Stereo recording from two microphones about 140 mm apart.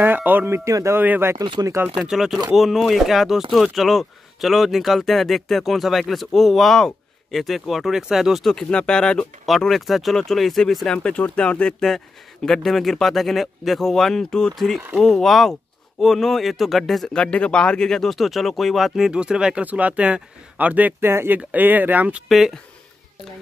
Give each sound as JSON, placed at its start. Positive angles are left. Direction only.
{"t": 0.0, "sound": "speech", "side_deg": -15}
{"t": 1.4, "sound": "speech", "side_deg": -30}
{"t": 2.0, "sound": "speech", "side_deg": -5}
{"t": 22.3, "sound": "speech", "side_deg": 0}